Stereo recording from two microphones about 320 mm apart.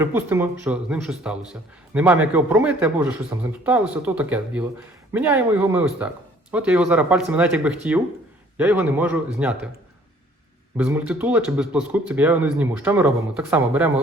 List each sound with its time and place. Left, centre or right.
0.0 s speech: centre
10.8 s speech: centre